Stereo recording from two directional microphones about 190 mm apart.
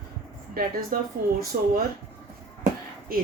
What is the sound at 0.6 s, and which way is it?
Speech, 50° right (ahead or behind).